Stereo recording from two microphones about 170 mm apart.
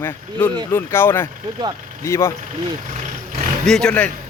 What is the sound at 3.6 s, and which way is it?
Speech, 5° left (ahead or behind).